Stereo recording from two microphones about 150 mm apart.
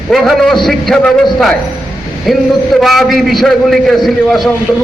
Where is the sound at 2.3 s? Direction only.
5° right (ahead or behind).